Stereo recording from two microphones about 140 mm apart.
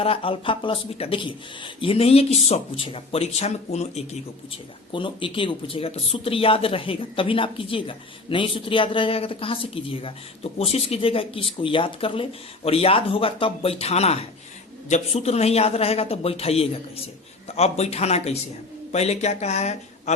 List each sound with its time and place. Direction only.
0.0 s a man's voice: 40° left (ahead or behind)